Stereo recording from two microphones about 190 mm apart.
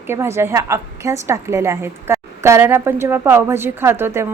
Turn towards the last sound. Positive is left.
turn(degrees=-10)  # may be behind; listen again after turning